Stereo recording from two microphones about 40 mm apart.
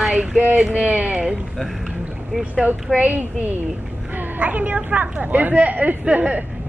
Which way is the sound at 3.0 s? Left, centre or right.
Right.